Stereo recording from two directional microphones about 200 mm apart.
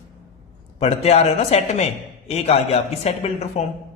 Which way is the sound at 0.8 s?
30° left (ahead or behind).